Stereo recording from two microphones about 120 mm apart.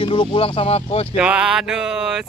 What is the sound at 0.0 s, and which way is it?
Speech, 45° left (ahead or behind).